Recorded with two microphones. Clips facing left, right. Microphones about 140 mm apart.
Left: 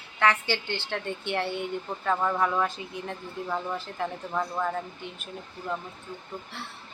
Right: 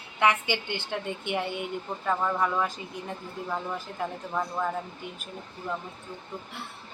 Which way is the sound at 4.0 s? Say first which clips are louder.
Even; 5° right (ahead or behind).